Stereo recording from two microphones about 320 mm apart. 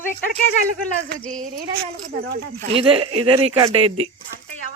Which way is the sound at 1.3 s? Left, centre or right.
Right.